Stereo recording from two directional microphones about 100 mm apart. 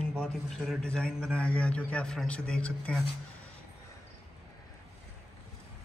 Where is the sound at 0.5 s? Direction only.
5° left (ahead or behind).